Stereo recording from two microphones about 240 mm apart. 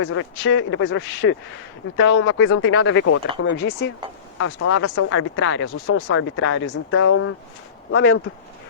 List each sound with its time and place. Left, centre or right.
0.0 s speech: left
3.6 s speech: left